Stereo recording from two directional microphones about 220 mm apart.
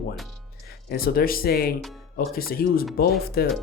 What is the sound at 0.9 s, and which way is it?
Speech, 40° left (ahead or behind).